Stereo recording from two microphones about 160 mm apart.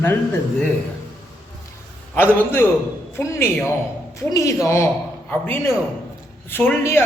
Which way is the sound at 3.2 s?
15° left (ahead or behind).